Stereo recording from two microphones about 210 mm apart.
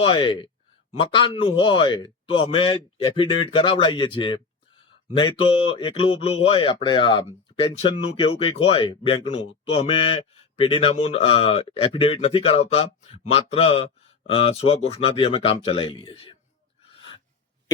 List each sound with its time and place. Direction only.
0.0 s speech: 25° left (ahead or behind)